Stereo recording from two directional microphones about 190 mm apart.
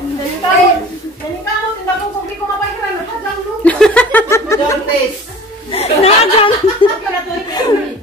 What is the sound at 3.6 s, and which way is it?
Chuckle, 5° left (ahead or behind).